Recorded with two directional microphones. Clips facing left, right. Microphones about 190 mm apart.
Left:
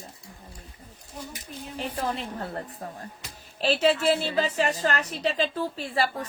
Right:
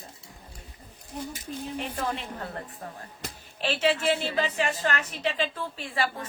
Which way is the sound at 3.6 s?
40° left (ahead or behind).